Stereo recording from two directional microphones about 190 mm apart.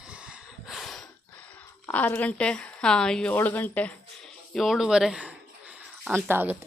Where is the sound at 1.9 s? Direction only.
10° left (ahead or behind).